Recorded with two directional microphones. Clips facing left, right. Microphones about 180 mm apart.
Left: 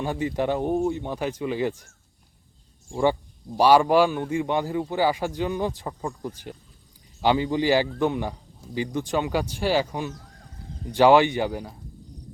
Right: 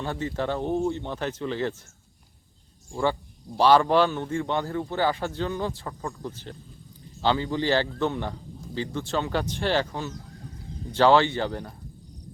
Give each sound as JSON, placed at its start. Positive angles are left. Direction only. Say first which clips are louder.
{"t": 0.0, "sound": "a man's voice", "louder": "left 3 dB", "side_deg": 15}
{"t": 2.9, "sound": "a man's voice", "louder": "left 4 dB", "side_deg": 15}